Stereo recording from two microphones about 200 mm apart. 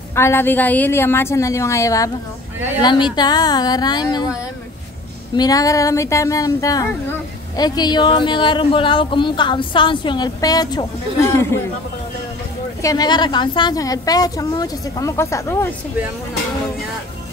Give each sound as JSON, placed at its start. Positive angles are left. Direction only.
{"t": 0.1, "sound": "a woman's voice", "side_deg": 10}
{"t": 5.3, "sound": "speech", "side_deg": 20}
{"t": 12.8, "sound": "a woman's voice", "side_deg": 20}